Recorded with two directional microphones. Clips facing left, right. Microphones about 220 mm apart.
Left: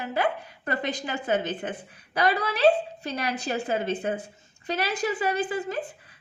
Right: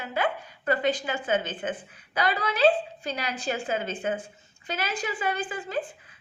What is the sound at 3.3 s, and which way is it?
A woman's voice, 40° left (ahead or behind).